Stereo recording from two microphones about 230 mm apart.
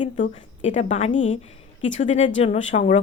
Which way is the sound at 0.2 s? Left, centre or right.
Left.